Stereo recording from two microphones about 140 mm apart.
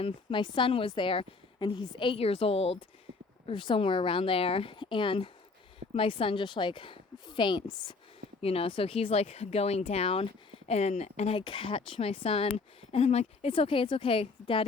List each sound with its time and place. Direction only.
0.0 s a woman's voice: 35° left (ahead or behind)
8.4 s speech: 45° left (ahead or behind)